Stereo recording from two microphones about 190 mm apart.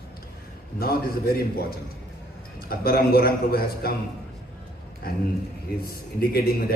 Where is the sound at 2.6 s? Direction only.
50° left (ahead or behind).